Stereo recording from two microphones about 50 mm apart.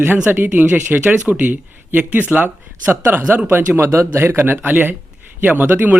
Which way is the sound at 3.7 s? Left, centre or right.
Right.